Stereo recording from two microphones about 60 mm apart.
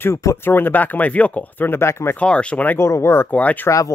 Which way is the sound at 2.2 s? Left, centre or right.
Centre.